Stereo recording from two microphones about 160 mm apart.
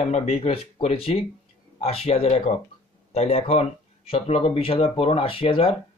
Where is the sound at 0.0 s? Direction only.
40° left (ahead or behind).